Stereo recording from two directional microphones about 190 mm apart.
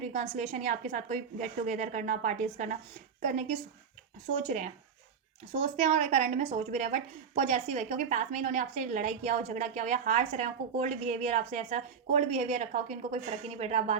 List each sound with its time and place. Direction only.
0.0 s a woman's voice: 35° right (ahead or behind)
4.4 s a woman's voice: 40° right (ahead or behind)
5.7 s a woman's voice: 35° right (ahead or behind)